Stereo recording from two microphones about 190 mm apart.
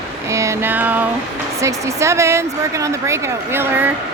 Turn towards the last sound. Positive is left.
turn(degrees=-10)  # may be behind; listen again after turning